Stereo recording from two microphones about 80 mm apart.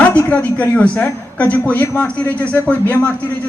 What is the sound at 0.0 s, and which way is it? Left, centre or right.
A woman's voice, centre.